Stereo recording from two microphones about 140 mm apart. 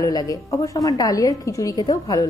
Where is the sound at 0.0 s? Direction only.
25° left (ahead or behind).